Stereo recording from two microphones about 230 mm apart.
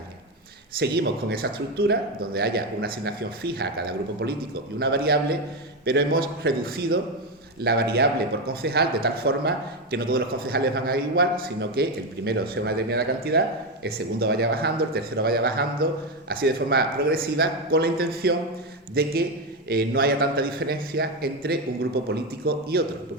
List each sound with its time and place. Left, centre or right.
0.8 s a man's voice: right